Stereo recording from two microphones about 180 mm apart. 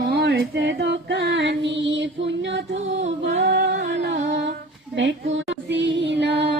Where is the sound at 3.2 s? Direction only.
60° right (ahead or behind); by 4.5 s 75° right (ahead or behind).